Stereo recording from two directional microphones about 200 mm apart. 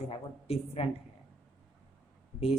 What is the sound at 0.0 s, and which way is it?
Speech, 30° left (ahead or behind).